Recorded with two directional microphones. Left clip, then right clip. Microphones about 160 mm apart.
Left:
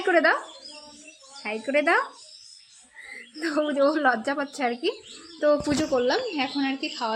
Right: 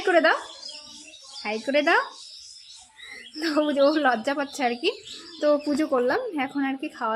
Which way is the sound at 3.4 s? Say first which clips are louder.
Right 2 dB; 40° right (ahead or behind).